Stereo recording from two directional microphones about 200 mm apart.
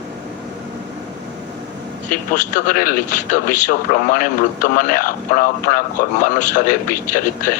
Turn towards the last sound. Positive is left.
turn(degrees=45)  # may be behind; listen again after turning